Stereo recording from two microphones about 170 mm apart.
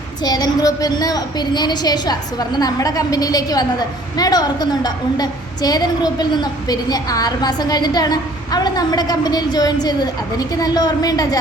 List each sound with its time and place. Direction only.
0.3 s a woman's voice: 20° left (ahead or behind)